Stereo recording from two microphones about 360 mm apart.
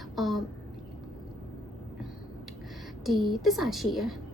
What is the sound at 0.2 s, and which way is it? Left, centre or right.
Speech, centre.